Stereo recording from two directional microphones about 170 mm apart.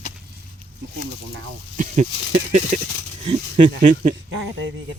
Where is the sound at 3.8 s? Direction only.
45° right (ahead or behind).